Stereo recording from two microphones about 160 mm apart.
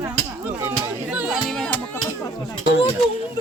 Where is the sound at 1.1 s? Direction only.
5° right (ahead or behind).